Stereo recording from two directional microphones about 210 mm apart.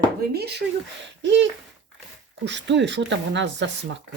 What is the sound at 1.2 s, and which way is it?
Speech, 55° right (ahead or behind).